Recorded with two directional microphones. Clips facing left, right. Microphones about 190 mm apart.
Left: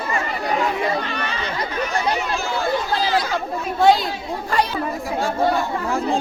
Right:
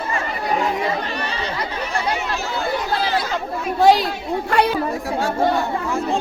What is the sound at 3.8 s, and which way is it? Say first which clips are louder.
Chatter: right 1 dB; 35° right (ahead or behind).